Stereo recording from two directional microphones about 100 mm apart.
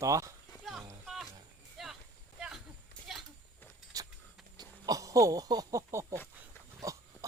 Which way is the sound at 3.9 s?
35° right (ahead or behind).